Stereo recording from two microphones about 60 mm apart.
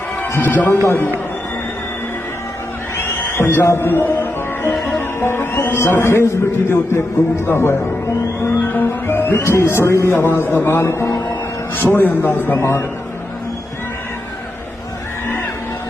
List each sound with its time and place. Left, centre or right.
0.2 s speech: left
3.0 s music: left
5.8 s a man's voice: left
8.7 s music: left
9.4 s a man's voice: left
11.7 s speech: left
12.5 s a man's voice: left